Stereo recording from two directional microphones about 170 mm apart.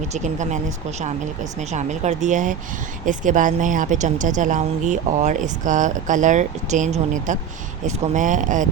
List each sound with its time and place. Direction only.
0.1 s a woman's voice: 45° right (ahead or behind)
1.7 s a woman's voice: 45° right (ahead or behind)